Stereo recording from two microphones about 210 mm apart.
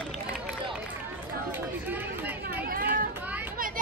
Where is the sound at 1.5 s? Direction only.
10° right (ahead or behind).